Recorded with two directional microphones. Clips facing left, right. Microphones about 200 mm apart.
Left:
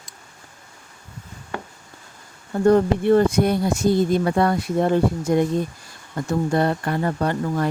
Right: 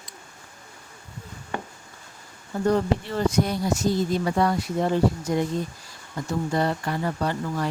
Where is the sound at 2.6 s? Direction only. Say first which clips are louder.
Left 7 dB; 55° left (ahead or behind).